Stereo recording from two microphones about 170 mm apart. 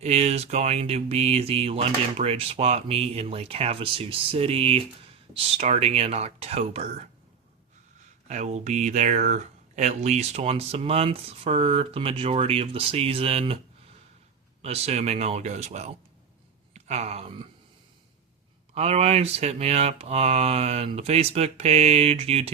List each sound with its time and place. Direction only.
0.0 s speech: 40° right (ahead or behind)
8.3 s speech: 40° right (ahead or behind)
14.6 s speech: 40° right (ahead or behind)
18.7 s speech: 40° right (ahead or behind)